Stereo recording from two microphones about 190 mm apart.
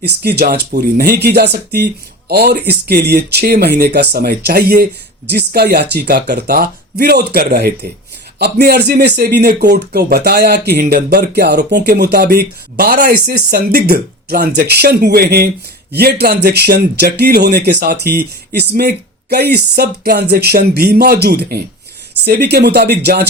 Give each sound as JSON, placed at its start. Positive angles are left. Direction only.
{"t": 0.0, "sound": "speech", "side_deg": -55}